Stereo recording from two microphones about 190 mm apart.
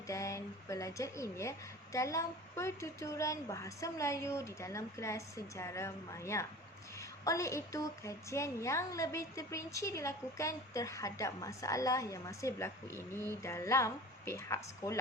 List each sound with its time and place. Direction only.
0.1 s a woman's voice: 15° left (ahead or behind)